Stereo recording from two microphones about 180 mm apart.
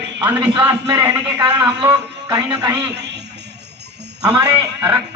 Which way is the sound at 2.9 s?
70° right (ahead or behind).